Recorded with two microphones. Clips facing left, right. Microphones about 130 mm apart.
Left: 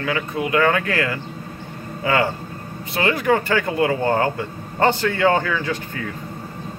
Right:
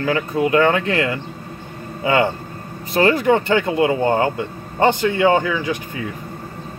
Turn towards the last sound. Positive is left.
turn(degrees=-15)  # may be behind; listen again after turning